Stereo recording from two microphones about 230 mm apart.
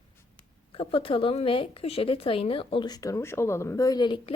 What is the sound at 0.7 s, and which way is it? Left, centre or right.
A woman's voice, left.